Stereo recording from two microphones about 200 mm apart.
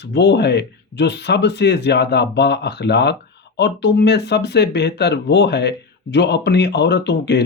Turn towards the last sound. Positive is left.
turn(degrees=60)  # may be behind; listen again after turning